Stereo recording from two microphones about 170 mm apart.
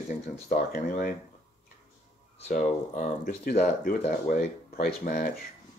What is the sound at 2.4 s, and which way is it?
Speech, 45° left (ahead or behind).